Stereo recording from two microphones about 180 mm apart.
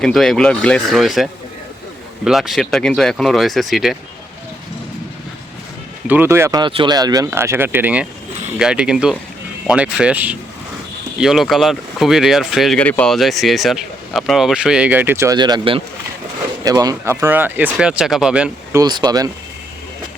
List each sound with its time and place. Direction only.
0.0 s speech: centre (ahead or behind)
6.1 s speech: 10° right (ahead or behind)
6.6 s speech: 25° right (ahead or behind); by 18.5 s 5° right (ahead or behind)
18.7 s speech: 20° right (ahead or behind)